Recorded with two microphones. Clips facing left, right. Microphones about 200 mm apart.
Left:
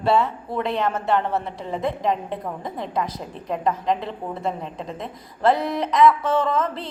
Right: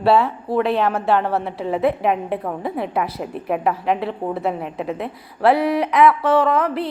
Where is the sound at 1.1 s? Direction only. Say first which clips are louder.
Right 3 dB; 85° right; by 6.7 s 70° right (ahead or behind).